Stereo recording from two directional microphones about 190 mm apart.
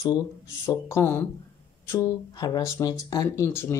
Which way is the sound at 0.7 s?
15° left (ahead or behind).